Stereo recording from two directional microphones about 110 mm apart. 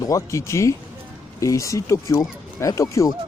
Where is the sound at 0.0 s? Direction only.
30° left (ahead or behind).